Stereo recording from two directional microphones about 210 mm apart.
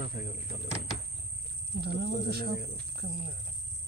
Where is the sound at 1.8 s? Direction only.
50° right (ahead or behind).